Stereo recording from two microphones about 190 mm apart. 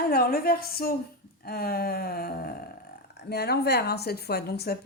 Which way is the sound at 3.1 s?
60° left (ahead or behind).